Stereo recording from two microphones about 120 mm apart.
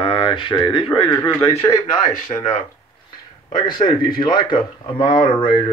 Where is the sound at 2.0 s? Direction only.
90° left.